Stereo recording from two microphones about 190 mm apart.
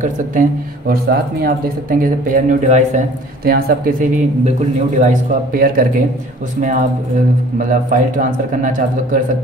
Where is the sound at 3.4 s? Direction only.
55° right (ahead or behind).